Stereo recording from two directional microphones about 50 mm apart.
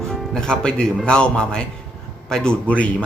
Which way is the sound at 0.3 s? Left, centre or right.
Centre.